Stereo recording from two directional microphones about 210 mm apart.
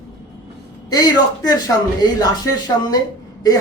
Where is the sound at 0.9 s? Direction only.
20° left (ahead or behind).